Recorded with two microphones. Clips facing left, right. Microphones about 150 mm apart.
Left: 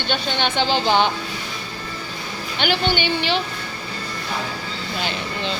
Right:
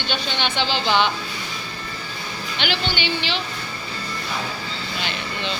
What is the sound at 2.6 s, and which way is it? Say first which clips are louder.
Speech: left 5 dB; 50° left (ahead or behind).